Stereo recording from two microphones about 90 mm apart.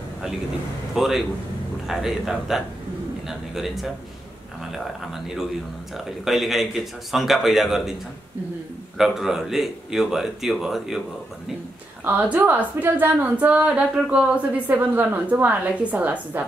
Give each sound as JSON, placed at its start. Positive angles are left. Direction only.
{"t": 0.9, "sound": "a man's voice", "side_deg": 0}
{"t": 8.9, "sound": "a man's voice", "side_deg": -5}
{"t": 12.0, "sound": "a woman's voice", "side_deg": -15}